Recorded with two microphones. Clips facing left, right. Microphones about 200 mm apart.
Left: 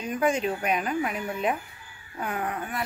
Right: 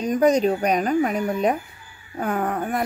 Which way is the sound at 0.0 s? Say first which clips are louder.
Right 8 dB; 40° right (ahead or behind).